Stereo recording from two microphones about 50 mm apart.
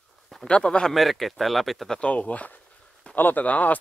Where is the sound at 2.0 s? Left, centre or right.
Left.